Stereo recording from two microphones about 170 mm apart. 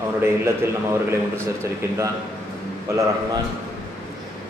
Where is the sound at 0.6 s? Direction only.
15° right (ahead or behind).